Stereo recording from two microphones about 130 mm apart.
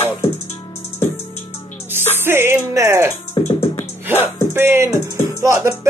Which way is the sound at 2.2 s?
20° right (ahead or behind).